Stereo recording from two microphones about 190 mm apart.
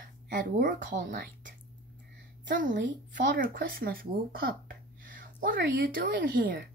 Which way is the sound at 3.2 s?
45° right (ahead or behind).